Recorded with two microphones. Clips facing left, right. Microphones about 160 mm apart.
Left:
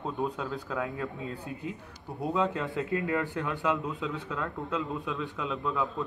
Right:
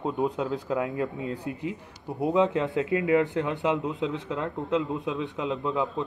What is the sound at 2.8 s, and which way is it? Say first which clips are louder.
Speech: right 5 dB; 90° right.